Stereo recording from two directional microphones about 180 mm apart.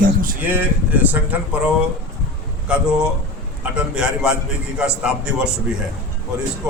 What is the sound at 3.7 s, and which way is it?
A man's voice, 5° right (ahead or behind).